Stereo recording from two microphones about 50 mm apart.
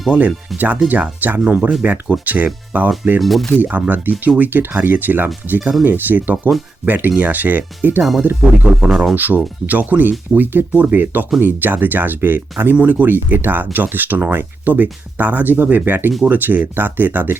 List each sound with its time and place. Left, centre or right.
0.1 s speech: right
3.2 s speech: centre
3.6 s speech: right
8.8 s speech: centre
9.1 s speech: right